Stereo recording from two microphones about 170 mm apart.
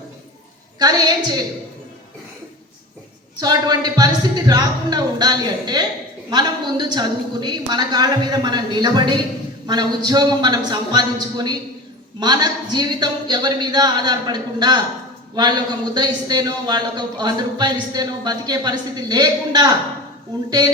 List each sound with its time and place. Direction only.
0.8 s speech: 25° right (ahead or behind)
3.4 s speech: 25° right (ahead or behind)